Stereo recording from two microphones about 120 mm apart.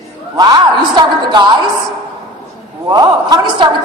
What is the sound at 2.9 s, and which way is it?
Speech, 35° right (ahead or behind).